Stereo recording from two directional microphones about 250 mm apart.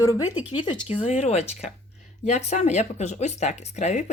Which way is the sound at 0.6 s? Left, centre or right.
Centre.